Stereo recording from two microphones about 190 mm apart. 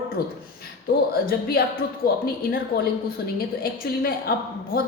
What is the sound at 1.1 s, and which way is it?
A woman's voice, 50° left (ahead or behind).